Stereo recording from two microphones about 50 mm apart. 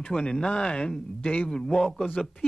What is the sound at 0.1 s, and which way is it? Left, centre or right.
A man's voice, centre.